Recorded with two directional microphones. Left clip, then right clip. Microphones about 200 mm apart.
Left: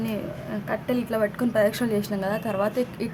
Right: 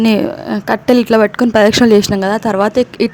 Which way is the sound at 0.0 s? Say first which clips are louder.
Right 17 dB; 50° right (ahead or behind).